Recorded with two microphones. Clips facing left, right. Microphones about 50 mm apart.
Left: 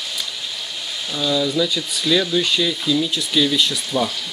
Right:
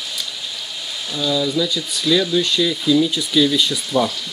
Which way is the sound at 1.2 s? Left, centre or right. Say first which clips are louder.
Even; centre.